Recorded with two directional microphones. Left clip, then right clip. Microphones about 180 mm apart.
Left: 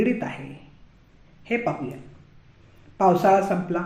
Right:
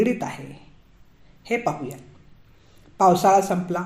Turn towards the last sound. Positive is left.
turn(degrees=-25)  # may be behind; listen again after turning